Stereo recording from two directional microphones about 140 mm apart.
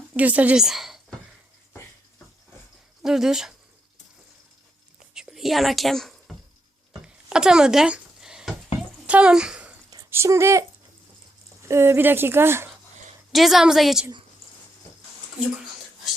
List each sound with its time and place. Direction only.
0.1 s speech: 10° right (ahead or behind)
3.0 s a woman's voice: 5° right (ahead or behind)
5.1 s a sound: 5° right (ahead or behind)
10.1 s speech: 20° right (ahead or behind)
11.6 s speech: 20° right (ahead or behind)
13.3 s a woman's voice: centre (ahead or behind)